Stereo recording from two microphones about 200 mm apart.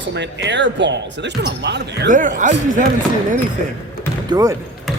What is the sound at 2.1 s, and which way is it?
Speech, 40° right (ahead or behind).